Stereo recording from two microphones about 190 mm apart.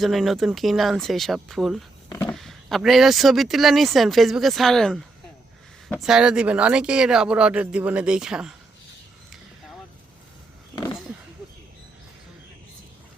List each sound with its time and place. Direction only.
0.0 s speech: centre (ahead or behind)
2.0 s a sound: 20° left (ahead or behind)
2.3 s speech: centre (ahead or behind)